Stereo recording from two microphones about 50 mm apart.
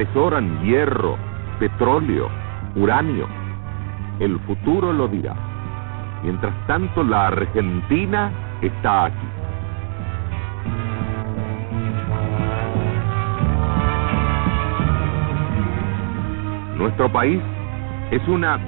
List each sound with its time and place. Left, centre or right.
0.0 s speech: left
6.2 s speech: left
10.6 s music: left
18.1 s speech: left